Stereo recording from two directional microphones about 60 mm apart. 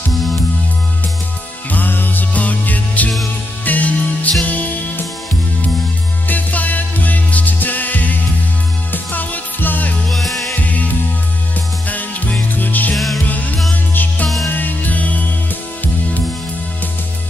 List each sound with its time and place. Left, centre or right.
1.7 s music: left
6.2 s music: left
10.0 s music: centre
10.5 s music: left
11.9 s music: left
12.9 s music: centre
13.3 s music: left